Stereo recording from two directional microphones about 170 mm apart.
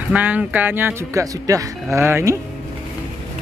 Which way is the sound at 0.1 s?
10° right (ahead or behind).